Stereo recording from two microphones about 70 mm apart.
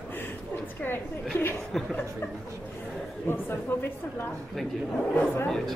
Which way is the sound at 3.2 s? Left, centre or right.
Left.